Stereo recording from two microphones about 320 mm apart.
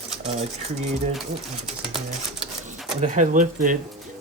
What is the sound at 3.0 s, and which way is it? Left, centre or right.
Speech, right.